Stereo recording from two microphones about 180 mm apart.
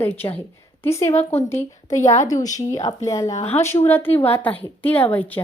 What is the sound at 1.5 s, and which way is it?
Speech, 15° left (ahead or behind).